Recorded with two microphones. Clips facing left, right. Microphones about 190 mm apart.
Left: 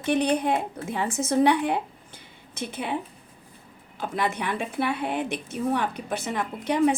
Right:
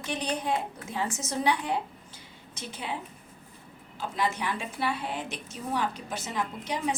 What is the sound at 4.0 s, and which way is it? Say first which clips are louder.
A woman's voice: left 3 dB; 55° left (ahead or behind).